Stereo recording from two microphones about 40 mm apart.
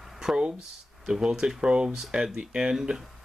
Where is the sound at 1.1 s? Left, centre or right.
Centre.